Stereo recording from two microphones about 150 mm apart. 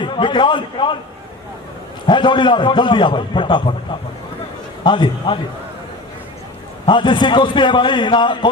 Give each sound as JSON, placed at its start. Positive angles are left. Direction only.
{"t": 0.0, "sound": "a man's voice", "side_deg": 30}
{"t": 2.0, "sound": "a man's voice", "side_deg": 30}
{"t": 4.8, "sound": "a man's voice", "side_deg": 30}
{"t": 6.8, "sound": "a man's voice", "side_deg": 30}